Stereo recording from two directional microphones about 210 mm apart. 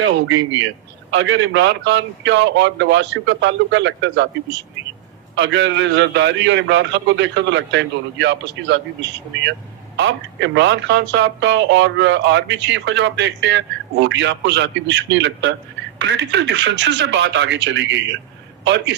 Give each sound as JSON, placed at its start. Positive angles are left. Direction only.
{"t": 1.1, "sound": "speech", "side_deg": -60}